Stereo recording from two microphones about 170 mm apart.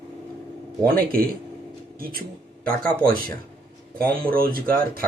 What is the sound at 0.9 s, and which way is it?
Speech, 60° right (ahead or behind).